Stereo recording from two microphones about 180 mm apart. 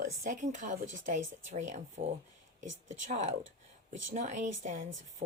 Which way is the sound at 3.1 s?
40° right (ahead or behind).